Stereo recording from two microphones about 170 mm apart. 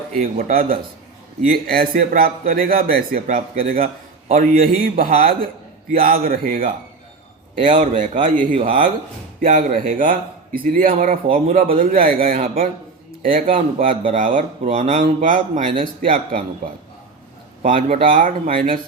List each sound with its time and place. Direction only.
0.2 s a man's voice: 55° right (ahead or behind)
14.7 s speech: 35° right (ahead or behind)
15.0 s speech: 50° right (ahead or behind)
17.6 s speech: 50° right (ahead or behind)